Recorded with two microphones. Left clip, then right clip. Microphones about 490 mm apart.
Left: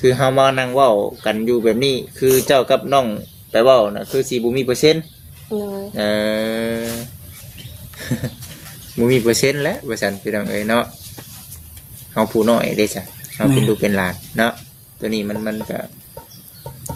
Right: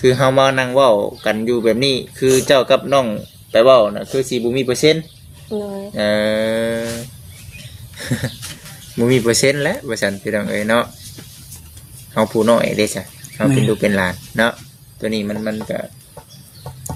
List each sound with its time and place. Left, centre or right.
0.0 s speech: left
5.5 s speech: left
5.9 s speech: left
7.9 s speech: left
12.1 s speech: left